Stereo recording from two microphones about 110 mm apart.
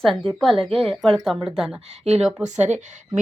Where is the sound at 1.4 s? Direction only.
10° right (ahead or behind).